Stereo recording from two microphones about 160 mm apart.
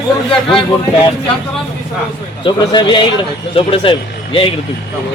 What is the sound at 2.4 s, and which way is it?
Speech, 30° left (ahead or behind).